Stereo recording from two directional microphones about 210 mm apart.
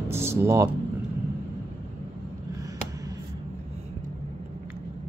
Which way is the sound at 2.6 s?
15° right (ahead or behind).